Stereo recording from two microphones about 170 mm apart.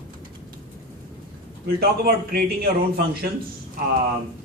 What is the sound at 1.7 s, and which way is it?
A man's voice, 65° right (ahead or behind).